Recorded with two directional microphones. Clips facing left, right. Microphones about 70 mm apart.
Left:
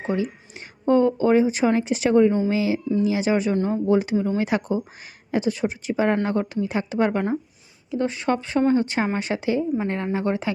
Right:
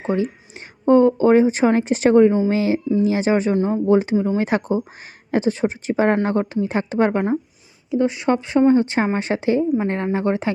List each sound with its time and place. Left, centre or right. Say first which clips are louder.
0.0 s a woman's voice: right 3 dB; right
3.5 s speech: right 4 dB; right
4.4 s a woman's voice: right 3 dB; right
7.9 s a woman's voice: right 4 dB; centre